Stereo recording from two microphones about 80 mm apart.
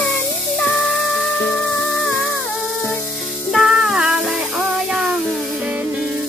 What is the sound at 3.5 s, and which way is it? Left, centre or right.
Music, centre.